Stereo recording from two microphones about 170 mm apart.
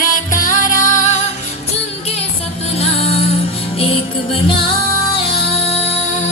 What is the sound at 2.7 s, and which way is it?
Music, 35° left (ahead or behind).